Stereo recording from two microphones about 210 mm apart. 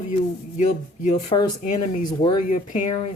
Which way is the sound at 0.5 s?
35° left (ahead or behind).